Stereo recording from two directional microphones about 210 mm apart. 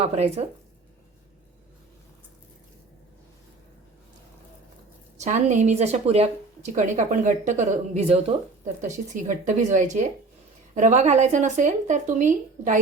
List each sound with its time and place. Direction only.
0.0 s speech: 30° right (ahead or behind)
5.2 s a woman's voice: 35° right (ahead or behind)